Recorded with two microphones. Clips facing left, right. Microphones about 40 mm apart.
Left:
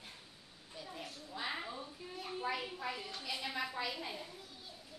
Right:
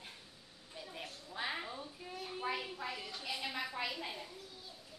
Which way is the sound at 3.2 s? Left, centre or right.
Centre.